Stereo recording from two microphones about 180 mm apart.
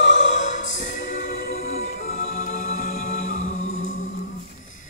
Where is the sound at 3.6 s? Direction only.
90° left.